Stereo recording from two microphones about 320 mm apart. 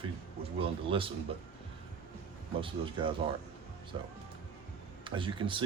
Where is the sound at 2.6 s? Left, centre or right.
Centre.